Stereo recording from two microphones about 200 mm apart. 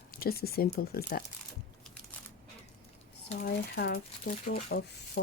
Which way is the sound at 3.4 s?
55° left (ahead or behind).